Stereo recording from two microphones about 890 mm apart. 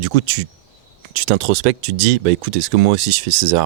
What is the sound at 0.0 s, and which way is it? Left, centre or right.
Speech, right.